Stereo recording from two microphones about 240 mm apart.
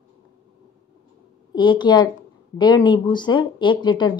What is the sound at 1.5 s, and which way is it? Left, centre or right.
A woman's voice, centre.